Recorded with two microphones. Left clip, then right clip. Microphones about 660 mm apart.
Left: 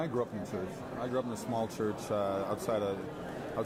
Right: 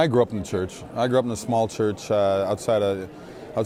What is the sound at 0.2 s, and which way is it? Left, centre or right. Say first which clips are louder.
Speech: right 13 dB; right.